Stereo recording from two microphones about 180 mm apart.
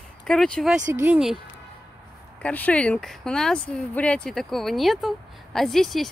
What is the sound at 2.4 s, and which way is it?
Speech, 10° left (ahead or behind).